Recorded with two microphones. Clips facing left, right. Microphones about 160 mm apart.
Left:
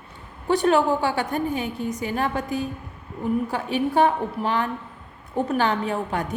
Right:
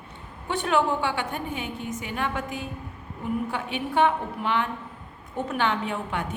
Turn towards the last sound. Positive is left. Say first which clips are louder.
# left 4 dB
turn(degrees=40)  # may be behind; listen again after turning